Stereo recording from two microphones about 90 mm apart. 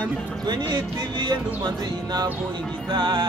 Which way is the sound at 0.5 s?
55° right (ahead or behind).